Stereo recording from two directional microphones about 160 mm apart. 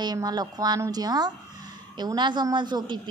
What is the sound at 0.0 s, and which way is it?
A woman's voice, 25° right (ahead or behind).